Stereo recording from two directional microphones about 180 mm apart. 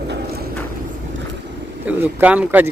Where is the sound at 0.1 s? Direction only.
65° right (ahead or behind).